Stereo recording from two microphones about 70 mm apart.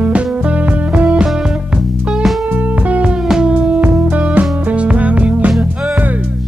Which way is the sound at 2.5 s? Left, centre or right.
Right.